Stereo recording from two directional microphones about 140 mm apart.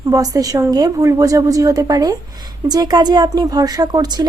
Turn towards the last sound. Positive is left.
turn(degrees=-30)  # may be behind; listen again after turning